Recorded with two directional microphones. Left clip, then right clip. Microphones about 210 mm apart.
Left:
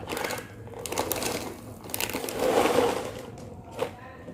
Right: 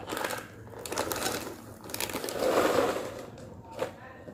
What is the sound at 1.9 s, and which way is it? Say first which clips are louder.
Crushing: left 3 dB; 10° left (ahead or behind).